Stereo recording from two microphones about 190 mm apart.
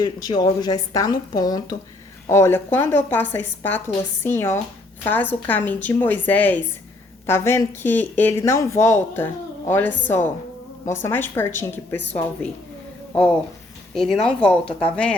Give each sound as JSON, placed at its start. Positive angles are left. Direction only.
{"t": 0.0, "sound": "a woman's voice", "side_deg": 20}
{"t": 13.9, "sound": "speech", "side_deg": 0}